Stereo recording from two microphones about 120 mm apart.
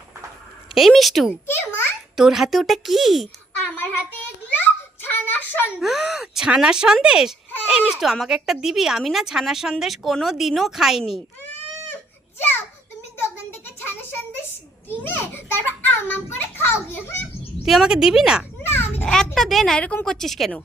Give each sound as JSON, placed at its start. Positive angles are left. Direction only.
{"t": 0.7, "sound": "a woman's voice", "side_deg": 0}
{"t": 1.5, "sound": "babbling", "side_deg": 20}
{"t": 2.1, "sound": "a woman's voice", "side_deg": -5}
{"t": 5.0, "sound": "child singing", "side_deg": 15}
{"t": 5.8, "sound": "a woman's voice", "side_deg": 0}
{"t": 12.4, "sound": "a sound", "side_deg": 15}
{"t": 13.7, "sound": "a sound", "side_deg": 20}
{"t": 14.8, "sound": "a child's voice", "side_deg": 20}
{"t": 17.7, "sound": "a woman's voice", "side_deg": -5}
{"t": 18.6, "sound": "children playing", "side_deg": 20}
{"t": 19.0, "sound": "a woman's voice", "side_deg": 5}